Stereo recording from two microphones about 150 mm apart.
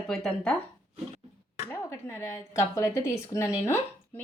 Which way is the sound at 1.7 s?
20° left (ahead or behind).